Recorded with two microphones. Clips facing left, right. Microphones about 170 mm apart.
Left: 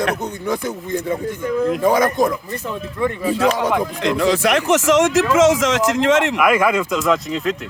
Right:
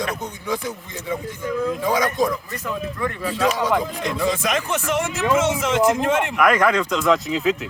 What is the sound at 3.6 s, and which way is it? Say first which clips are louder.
Speech: left 3 dB; 75° left (ahead or behind).